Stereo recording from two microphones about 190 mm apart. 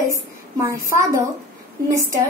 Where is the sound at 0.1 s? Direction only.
15° right (ahead or behind).